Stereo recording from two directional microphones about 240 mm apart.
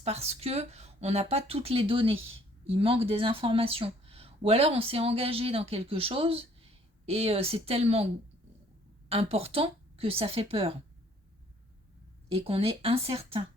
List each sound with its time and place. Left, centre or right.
0.0 s speech: right
9.0 s speech: right
12.3 s speech: right